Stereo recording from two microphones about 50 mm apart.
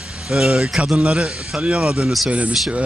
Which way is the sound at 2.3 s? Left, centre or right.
Right.